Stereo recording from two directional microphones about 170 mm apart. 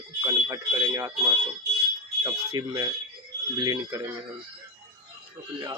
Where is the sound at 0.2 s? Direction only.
20° right (ahead or behind).